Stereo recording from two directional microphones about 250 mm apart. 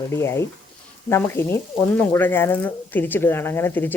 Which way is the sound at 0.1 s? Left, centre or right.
Centre.